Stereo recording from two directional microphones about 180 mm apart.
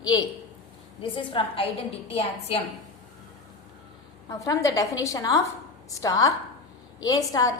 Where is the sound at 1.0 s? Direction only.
25° left (ahead or behind).